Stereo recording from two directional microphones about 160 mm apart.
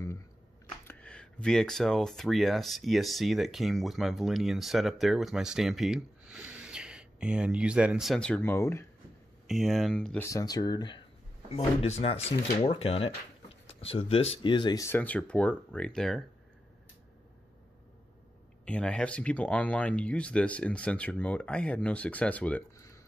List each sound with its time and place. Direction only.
0.8 s speech: 5° left (ahead or behind)
9.5 s speech: centre (ahead or behind)
10.2 s speech: 20° left (ahead or behind)
11.5 s speech: 40° left (ahead or behind)
14.9 s speech: 10° left (ahead or behind)
18.7 s speech: 5° left (ahead or behind)